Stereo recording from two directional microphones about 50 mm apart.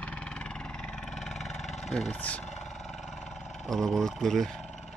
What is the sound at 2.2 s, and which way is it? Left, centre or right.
Speech, left.